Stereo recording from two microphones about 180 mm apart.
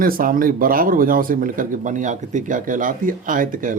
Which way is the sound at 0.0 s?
55° right (ahead or behind).